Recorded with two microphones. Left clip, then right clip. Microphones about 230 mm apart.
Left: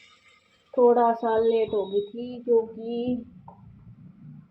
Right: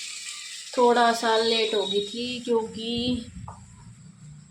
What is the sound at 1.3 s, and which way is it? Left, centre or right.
Speech, centre.